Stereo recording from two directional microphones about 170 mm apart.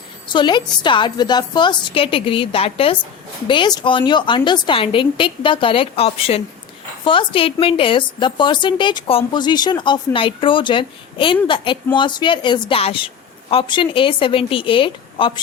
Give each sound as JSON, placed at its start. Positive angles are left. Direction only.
{"t": 0.3, "sound": "a woman's voice", "side_deg": 25}